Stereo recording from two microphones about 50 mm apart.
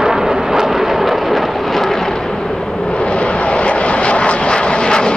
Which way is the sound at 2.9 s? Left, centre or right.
Left.